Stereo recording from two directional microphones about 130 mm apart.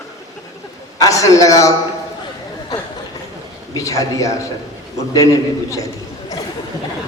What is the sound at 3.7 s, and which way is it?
A man's voice, 25° left (ahead or behind).